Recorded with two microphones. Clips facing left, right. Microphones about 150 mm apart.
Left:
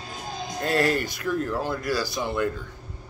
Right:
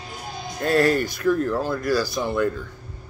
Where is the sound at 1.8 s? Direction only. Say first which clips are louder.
Right 5 dB; 45° right (ahead or behind).